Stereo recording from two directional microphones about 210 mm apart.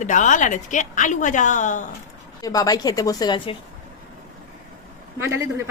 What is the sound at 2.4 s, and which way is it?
A woman's voice, 15° left (ahead or behind).